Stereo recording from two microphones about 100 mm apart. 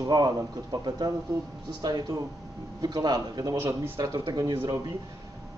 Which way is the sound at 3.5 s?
25° right (ahead or behind).